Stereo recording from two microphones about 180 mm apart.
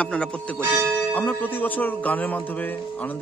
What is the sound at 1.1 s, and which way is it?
A man's voice, 10° left (ahead or behind).